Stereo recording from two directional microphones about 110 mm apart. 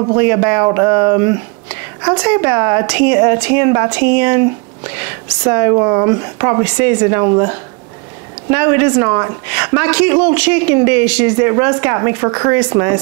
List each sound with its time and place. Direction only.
0.2 s a woman's voice: 25° right (ahead or behind)